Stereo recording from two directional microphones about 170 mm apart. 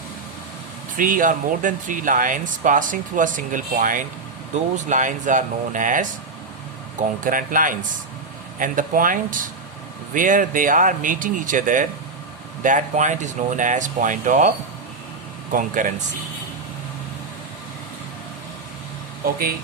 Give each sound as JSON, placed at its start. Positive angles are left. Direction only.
{"t": 0.9, "sound": "speech", "side_deg": -55}
{"t": 7.2, "sound": "speech", "side_deg": -55}
{"t": 15.5, "sound": "speech", "side_deg": -50}